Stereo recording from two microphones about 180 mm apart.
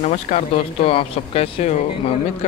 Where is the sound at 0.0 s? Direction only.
40° left (ahead or behind).